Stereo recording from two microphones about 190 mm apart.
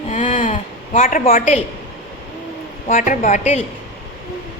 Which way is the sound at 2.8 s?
45° left (ahead or behind).